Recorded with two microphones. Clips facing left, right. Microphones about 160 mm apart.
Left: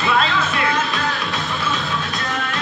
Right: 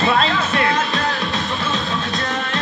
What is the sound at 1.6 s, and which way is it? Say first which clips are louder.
Music: right 1 dB; 25° right (ahead or behind).